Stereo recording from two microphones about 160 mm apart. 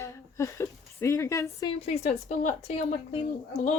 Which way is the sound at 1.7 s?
40° left (ahead or behind).